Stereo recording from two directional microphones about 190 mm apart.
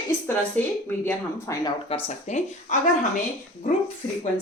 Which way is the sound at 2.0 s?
35° left (ahead or behind).